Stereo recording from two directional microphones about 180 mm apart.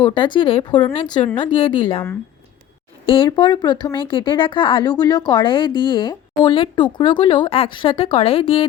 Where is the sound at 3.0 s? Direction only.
30° left (ahead or behind).